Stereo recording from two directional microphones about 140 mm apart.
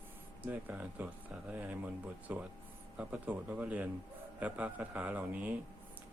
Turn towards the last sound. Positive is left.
turn(degrees=-10)  # may be behind; listen again after turning